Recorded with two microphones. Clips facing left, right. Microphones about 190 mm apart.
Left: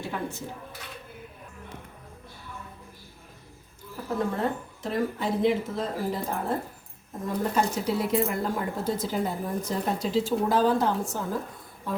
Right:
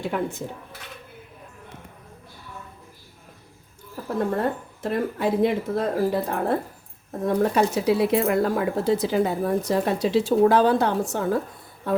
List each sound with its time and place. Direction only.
0.1 s speech: 55° right (ahead or behind)
4.4 s speech: 60° right (ahead or behind); by 11.3 s 75° right (ahead or behind)